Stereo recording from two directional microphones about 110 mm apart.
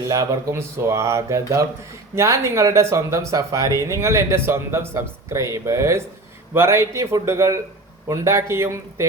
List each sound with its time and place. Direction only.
0.1 s speech: 30° right (ahead or behind)